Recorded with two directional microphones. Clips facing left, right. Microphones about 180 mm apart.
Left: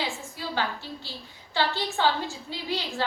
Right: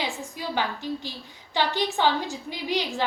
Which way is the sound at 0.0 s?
20° right (ahead or behind).